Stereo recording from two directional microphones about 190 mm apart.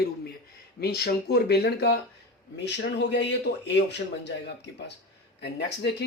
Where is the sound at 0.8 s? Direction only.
55° left (ahead or behind).